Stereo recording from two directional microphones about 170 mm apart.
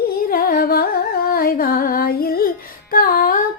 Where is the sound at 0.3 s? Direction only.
60° left (ahead or behind).